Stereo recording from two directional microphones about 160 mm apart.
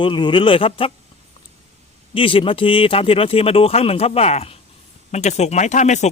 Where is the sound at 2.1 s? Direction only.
35° left (ahead or behind).